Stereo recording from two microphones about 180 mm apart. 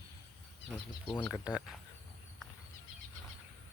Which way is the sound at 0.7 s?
5° left (ahead or behind).